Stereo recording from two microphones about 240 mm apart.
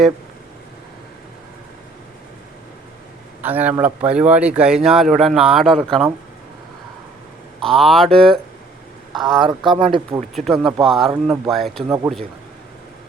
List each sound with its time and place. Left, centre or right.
3.4 s a man's voice: centre
7.6 s speech: centre
9.4 s speech: centre
10.2 s speech: centre
11.1 s a man's voice: centre
11.5 s speech: centre